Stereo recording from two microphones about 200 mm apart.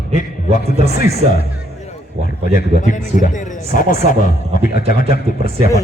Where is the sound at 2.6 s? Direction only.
40° left (ahead or behind).